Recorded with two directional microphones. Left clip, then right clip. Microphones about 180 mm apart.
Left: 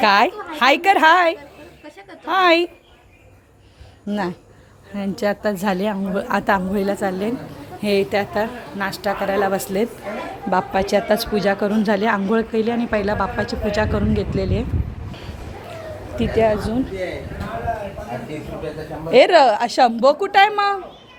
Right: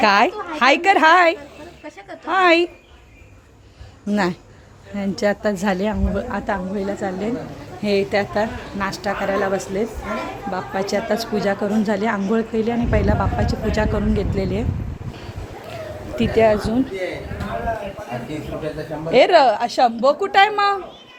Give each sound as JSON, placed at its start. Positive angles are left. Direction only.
{"t": 0.0, "sound": "a woman's voice", "side_deg": 0}
{"t": 4.1, "sound": "speech", "side_deg": -15}
{"t": 4.9, "sound": "a woman's voice", "side_deg": 0}
{"t": 6.2, "sound": "a woman's voice", "side_deg": 25}
{"t": 16.1, "sound": "speech", "side_deg": -10}
{"t": 19.1, "sound": "a woman's voice", "side_deg": 10}
{"t": 20.1, "sound": "a woman's voice", "side_deg": 10}